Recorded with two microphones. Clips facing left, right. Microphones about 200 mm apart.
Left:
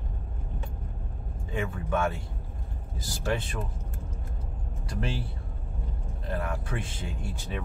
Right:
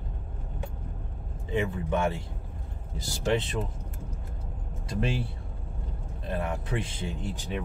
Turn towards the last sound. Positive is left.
turn(degrees=-20)  # may be behind; listen again after turning